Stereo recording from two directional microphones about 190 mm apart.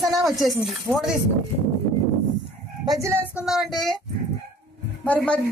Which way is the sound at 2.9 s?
15° right (ahead or behind).